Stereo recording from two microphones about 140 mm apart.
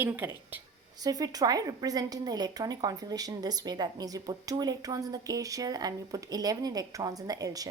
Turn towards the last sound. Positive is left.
turn(degrees=-25)  # may be behind; listen again after turning